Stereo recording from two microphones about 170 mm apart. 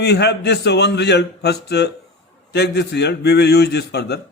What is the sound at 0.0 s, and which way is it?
A man's voice, 80° left.